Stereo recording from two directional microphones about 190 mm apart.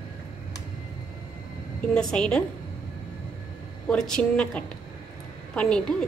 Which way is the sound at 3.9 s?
5° left (ahead or behind).